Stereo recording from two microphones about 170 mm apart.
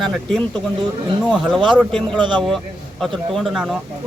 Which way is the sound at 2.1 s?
25° right (ahead or behind).